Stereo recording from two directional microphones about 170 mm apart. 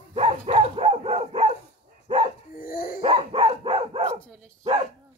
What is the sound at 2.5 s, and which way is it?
Dog, 60° left (ahead or behind).